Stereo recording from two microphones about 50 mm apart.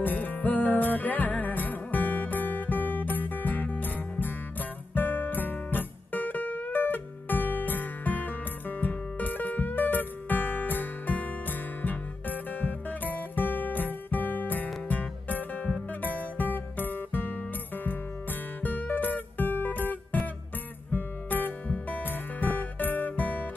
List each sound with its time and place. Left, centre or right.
0.0 s music: left
18.6 s music: left